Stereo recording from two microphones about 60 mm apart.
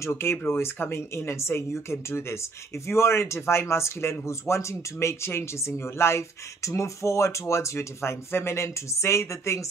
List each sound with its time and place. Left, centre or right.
0.0 s speech: left